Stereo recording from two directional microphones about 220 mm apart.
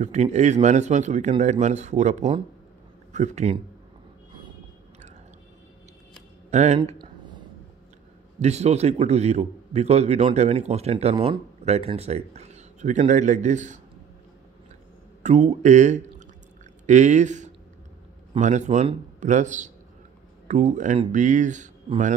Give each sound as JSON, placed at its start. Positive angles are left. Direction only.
{"t": 0.0, "sound": "a man's voice", "side_deg": -30}
{"t": 6.5, "sound": "a sound", "side_deg": -30}
{"t": 8.4, "sound": "a man's voice", "side_deg": -30}
{"t": 15.2, "sound": "a man's voice", "side_deg": -30}